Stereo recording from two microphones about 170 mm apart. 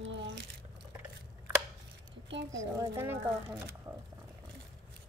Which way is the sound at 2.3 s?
90° right.